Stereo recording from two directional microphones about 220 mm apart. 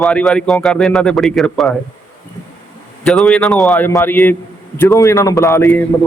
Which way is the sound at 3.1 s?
5° left (ahead or behind).